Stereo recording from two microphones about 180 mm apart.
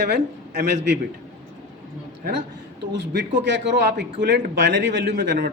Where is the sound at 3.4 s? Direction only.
80° right.